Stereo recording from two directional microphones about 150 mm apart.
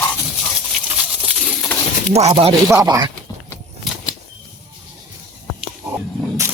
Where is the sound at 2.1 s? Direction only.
45° right (ahead or behind).